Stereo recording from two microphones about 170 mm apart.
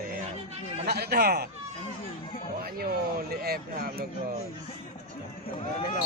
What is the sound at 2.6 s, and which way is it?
A man's voice, 65° right (ahead or behind).